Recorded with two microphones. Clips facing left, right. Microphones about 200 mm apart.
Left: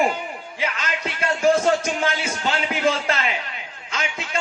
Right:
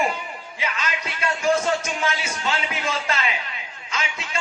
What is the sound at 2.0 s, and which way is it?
A man's voice, 55° left (ahead or behind).